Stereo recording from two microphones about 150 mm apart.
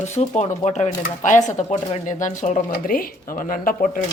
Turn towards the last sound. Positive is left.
turn(degrees=65)  # may be behind; listen again after turning